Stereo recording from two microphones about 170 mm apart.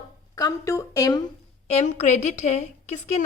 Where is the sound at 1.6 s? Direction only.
40° left (ahead or behind).